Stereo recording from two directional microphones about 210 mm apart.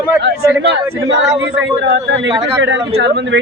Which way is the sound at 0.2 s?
55° right (ahead or behind).